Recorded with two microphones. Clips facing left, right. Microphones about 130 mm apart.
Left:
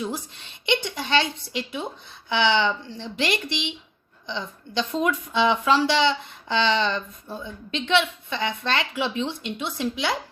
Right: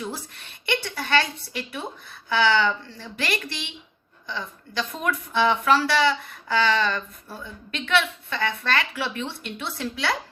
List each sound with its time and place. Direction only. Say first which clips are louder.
0.0 s a woman's voice: left 3 dB; 20° left (ahead or behind)